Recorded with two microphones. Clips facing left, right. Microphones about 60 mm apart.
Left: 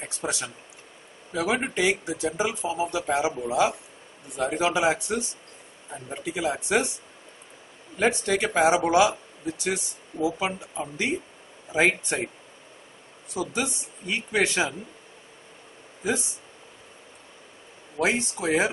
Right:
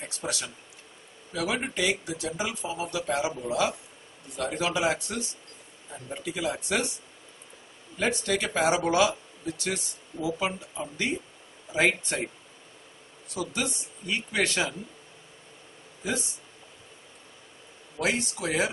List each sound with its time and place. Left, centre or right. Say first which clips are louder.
0.0 s speech: left 3 dB; left
8.0 s speech: left 4 dB; left
13.3 s speech: left 3 dB; centre
16.0 s speech: left 4 dB; centre
18.0 s speech: left 3 dB; left